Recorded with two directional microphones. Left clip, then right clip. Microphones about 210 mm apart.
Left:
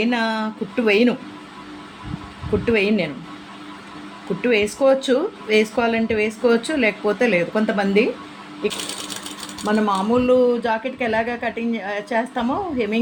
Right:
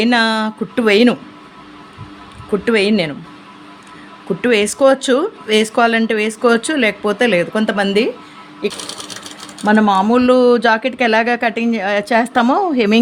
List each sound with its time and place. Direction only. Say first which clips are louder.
0.0 s speech: right 7 dB; 45° right (ahead or behind)
2.6 s speech: right 5 dB; 40° right (ahead or behind)
4.4 s speech: right 5 dB; 40° right (ahead or behind)
9.6 s speech: right 7 dB; 55° right (ahead or behind)